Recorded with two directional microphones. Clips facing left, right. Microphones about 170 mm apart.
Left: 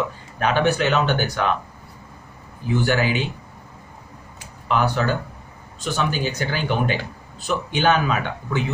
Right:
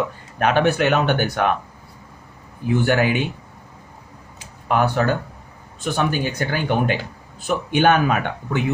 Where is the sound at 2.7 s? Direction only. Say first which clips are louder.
Right 2 dB; 55° right (ahead or behind).